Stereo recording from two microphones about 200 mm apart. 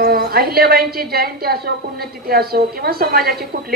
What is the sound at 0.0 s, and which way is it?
A woman's voice, 50° right (ahead or behind).